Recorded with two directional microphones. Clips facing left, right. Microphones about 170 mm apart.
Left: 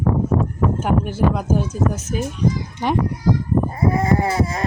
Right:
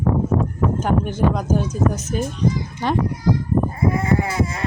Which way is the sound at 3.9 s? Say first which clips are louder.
Left 2 dB; 35° left (ahead or behind).